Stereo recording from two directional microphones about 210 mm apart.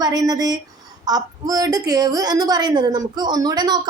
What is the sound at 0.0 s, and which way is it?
A woman's voice, 20° right (ahead or behind).